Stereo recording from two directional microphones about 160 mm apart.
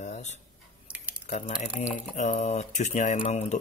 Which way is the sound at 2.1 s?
45° left (ahead or behind).